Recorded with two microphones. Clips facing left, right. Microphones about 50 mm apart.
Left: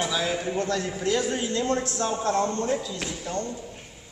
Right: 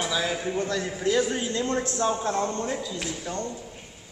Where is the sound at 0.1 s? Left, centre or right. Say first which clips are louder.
Even; centre.